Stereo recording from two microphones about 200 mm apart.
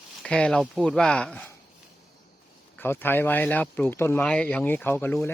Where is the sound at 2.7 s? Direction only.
10° left (ahead or behind).